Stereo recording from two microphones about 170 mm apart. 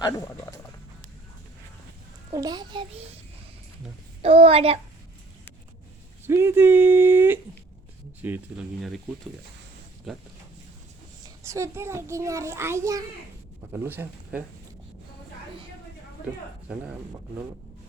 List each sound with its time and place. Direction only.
2.3 s a child's voice: 20° right (ahead or behind)
4.2 s a child's voice: 35° right (ahead or behind)
6.2 s a child's voice: 15° right (ahead or behind)
10.1 s speech: centre (ahead or behind)
11.4 s a child's voice: 15° right (ahead or behind)